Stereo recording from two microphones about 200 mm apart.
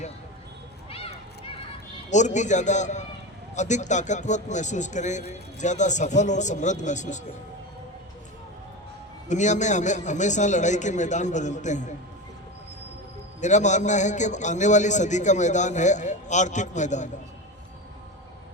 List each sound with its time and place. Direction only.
2.0 s a man's voice: 35° left (ahead or behind)
9.3 s a man's voice: 35° left (ahead or behind)
13.4 s a man's voice: 35° left (ahead or behind)